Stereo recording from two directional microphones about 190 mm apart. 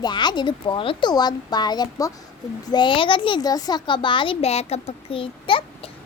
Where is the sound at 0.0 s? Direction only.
25° left (ahead or behind).